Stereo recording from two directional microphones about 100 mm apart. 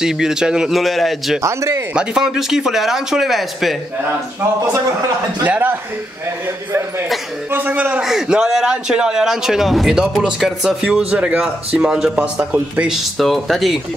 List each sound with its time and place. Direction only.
0.0 s speech: 5° right (ahead or behind)
1.4 s speech: 30° right (ahead or behind)
2.0 s speech: 5° right (ahead or behind)
5.4 s a man's voice: 20° right (ahead or behind)
7.5 s a man's voice: 20° right (ahead or behind)
8.0 s a man's voice: 5° right (ahead or behind)
13.2 s speech: centre (ahead or behind)